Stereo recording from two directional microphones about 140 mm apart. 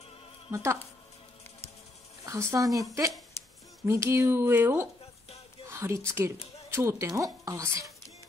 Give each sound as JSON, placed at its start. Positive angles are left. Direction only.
{"t": 0.5, "sound": "speech", "side_deg": -20}
{"t": 2.2, "sound": "speech", "side_deg": -20}